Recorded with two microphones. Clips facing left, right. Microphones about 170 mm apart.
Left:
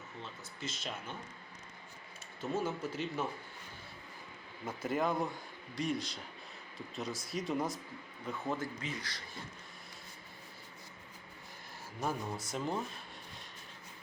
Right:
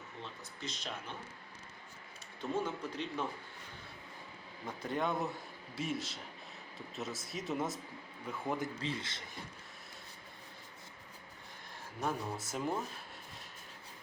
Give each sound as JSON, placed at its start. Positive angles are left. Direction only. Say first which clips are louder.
{"t": 0.2, "sound": "speech", "louder": "left 1 dB", "side_deg": 0}
{"t": 2.4, "sound": "a man's voice", "louder": "left 1 dB", "side_deg": 5}
{"t": 4.6, "sound": "speech", "louder": "left 2 dB", "side_deg": 5}
{"t": 8.3, "sound": "speech", "louder": "even", "side_deg": -15}
{"t": 8.8, "sound": "speech", "louder": "right 3 dB", "side_deg": -25}
{"t": 11.9, "sound": "speech", "louder": "even", "side_deg": 0}